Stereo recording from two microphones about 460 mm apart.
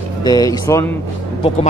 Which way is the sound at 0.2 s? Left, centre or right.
Centre.